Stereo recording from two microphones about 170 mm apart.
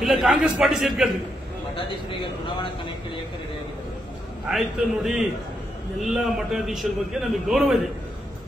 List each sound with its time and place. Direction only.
0.0 s a man's voice: centre (ahead or behind)
2.0 s speech: 30° left (ahead or behind)
4.5 s a man's voice: centre (ahead or behind)